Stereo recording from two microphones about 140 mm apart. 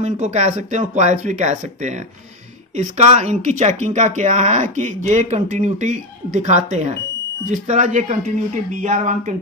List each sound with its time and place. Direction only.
0.0 s speech: 55° right (ahead or behind)